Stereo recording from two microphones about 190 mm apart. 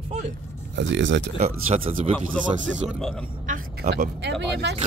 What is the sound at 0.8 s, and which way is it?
Speech, 70° right (ahead or behind).